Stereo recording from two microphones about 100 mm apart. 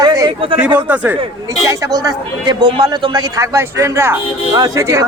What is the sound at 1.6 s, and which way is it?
Speech, 40° right (ahead or behind).